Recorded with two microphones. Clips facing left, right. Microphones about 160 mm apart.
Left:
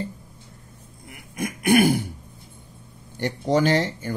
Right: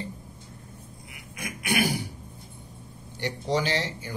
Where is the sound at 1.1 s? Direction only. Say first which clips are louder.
Left 9 dB; 50° left (ahead or behind).